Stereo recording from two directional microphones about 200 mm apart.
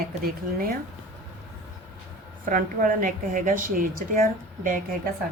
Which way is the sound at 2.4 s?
40° right (ahead or behind).